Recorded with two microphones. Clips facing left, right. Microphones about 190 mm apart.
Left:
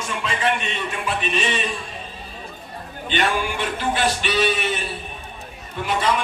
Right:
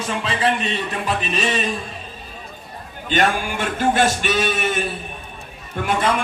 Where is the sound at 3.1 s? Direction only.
45° right (ahead or behind).